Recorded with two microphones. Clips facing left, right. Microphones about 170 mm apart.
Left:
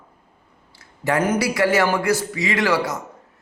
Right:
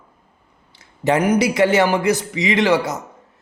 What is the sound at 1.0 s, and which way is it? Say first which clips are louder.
A man's voice: right 4 dB; 15° right (ahead or behind).